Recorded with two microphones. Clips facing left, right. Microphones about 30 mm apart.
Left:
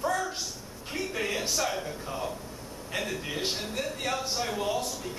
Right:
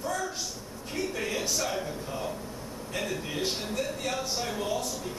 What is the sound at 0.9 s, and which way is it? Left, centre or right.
A man's voice, centre.